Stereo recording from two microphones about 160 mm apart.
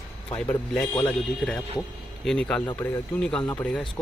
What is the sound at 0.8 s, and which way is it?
Speech, 10° left (ahead or behind).